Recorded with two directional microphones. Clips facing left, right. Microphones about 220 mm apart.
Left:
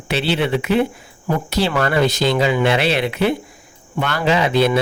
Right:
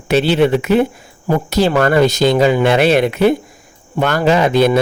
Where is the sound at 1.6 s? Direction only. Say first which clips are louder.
Right 5 dB; 45° right (ahead or behind).